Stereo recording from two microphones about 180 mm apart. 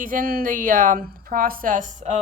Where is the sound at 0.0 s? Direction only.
50° right (ahead or behind).